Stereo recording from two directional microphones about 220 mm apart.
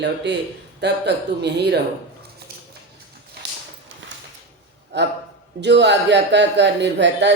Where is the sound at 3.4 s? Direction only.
50° right (ahead or behind).